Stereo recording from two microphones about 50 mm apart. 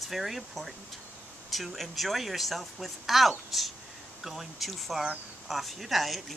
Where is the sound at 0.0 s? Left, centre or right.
Centre.